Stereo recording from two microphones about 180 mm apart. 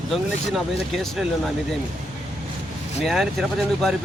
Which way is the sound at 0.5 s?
Centre (ahead or behind).